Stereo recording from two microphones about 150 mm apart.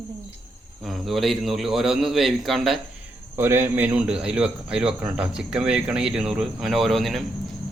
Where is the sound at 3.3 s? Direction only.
15° right (ahead or behind).